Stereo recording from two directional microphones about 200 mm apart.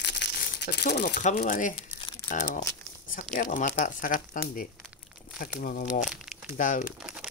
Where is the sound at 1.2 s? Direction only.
40° left (ahead or behind).